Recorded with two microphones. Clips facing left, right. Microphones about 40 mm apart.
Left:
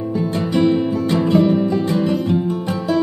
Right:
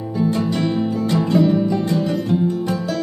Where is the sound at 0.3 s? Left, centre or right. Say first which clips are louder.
Left 7 dB; left.